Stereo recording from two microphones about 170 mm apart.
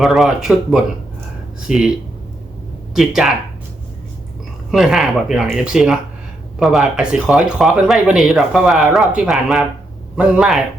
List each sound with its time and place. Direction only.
0.0 s speech: centre (ahead or behind)
2.9 s speech: centre (ahead or behind)
4.7 s speech: 5° right (ahead or behind)